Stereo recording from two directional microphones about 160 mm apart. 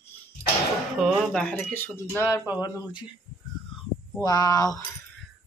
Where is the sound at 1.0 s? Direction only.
5° right (ahead or behind); by 3.0 s 25° left (ahead or behind).